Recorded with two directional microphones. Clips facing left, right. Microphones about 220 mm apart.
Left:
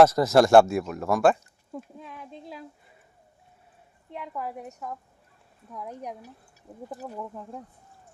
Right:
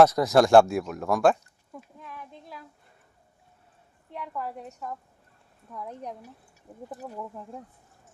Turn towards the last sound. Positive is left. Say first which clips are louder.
# left 1 dB
turn(degrees=5)  # may be behind; listen again after turning